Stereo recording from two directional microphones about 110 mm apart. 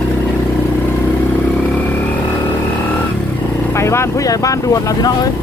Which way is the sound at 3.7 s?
25° left (ahead or behind).